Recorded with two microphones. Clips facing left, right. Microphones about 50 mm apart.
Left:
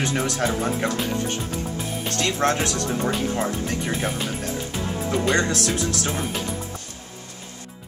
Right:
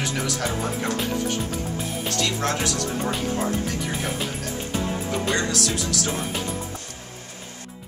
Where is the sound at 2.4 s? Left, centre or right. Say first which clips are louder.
Left 7 dB; left.